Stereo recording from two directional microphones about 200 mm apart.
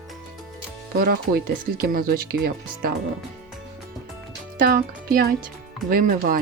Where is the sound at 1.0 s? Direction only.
50° right (ahead or behind).